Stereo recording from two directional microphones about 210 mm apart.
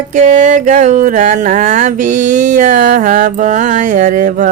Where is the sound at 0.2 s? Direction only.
35° right (ahead or behind).